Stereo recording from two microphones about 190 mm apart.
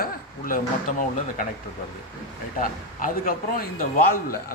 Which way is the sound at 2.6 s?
45° left (ahead or behind).